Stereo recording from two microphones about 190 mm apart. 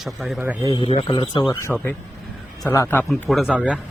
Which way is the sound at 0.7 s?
30° left (ahead or behind).